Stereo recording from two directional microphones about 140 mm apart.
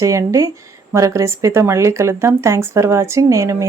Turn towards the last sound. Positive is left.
turn(degrees=-20)  # may be behind; listen again after turning